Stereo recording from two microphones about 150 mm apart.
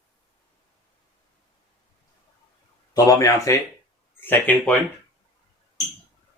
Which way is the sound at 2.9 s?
25° left (ahead or behind).